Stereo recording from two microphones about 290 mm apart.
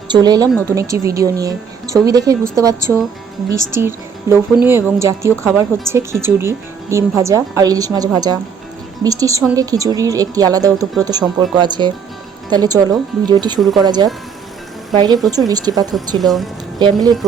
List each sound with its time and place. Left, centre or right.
0.1 s a woman's voice: centre
13.6 s speech: centre
13.8 s a woman's voice: centre
16.0 s speech: centre
16.7 s speech: centre